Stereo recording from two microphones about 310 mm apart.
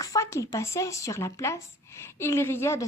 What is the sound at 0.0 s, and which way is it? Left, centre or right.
A woman's voice, centre.